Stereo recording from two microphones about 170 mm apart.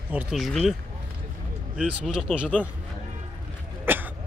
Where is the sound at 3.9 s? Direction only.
10° right (ahead or behind).